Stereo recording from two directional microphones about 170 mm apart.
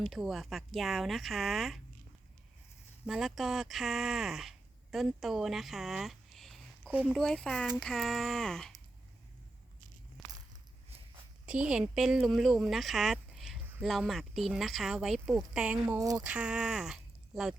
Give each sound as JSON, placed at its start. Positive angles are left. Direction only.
{"t": 0.0, "sound": "speech", "side_deg": 0}
{"t": 3.1, "sound": "speech", "side_deg": 0}
{"t": 7.2, "sound": "speech", "side_deg": 5}
{"t": 10.2, "sound": "a sound", "side_deg": 0}
{"t": 11.4, "sound": "speech", "side_deg": -5}
{"t": 16.0, "sound": "speech", "side_deg": -20}
{"t": 16.2, "sound": "speech", "side_deg": -5}